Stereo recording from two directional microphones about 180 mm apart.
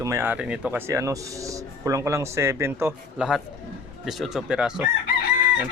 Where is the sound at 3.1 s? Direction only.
5° right (ahead or behind).